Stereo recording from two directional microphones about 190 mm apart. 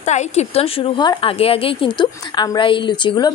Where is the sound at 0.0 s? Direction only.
35° left (ahead or behind).